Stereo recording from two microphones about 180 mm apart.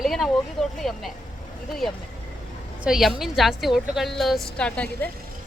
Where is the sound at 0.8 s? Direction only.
Centre (ahead or behind).